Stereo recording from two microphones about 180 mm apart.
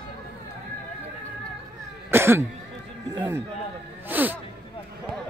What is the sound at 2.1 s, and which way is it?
Cough, 15° right (ahead or behind).